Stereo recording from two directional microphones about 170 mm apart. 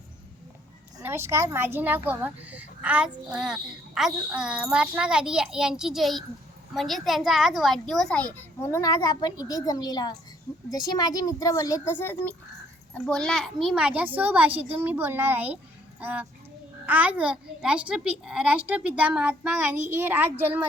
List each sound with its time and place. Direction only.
1.0 s a child's voice: 15° right (ahead or behind)